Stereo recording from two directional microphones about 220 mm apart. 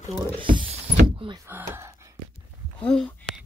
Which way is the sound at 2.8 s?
5° left (ahead or behind).